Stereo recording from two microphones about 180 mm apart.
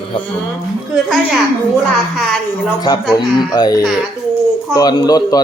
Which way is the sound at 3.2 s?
25° left (ahead or behind).